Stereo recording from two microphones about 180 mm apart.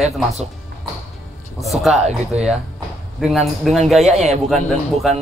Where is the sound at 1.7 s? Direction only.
Centre (ahead or behind).